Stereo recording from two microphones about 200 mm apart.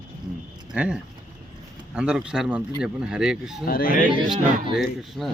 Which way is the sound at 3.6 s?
45° left (ahead or behind).